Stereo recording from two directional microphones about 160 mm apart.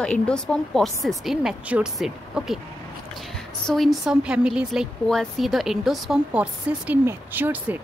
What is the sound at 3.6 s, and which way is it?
A woman's voice, centre (ahead or behind).